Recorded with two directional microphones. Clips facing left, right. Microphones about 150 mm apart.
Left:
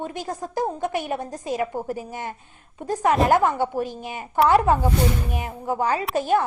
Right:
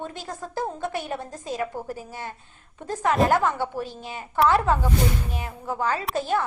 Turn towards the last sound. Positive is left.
turn(degrees=15)  # may be behind; listen again after turning